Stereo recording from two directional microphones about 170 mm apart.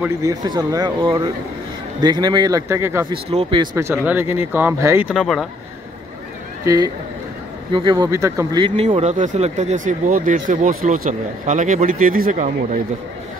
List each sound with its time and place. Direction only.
0.0 s speech: 20° right (ahead or behind)
3.1 s speech: 35° right (ahead or behind)
3.7 s speech: 15° right (ahead or behind)
5.1 s speech: centre (ahead or behind)
6.6 s speech: 20° right (ahead or behind); by 12.4 s 50° right (ahead or behind)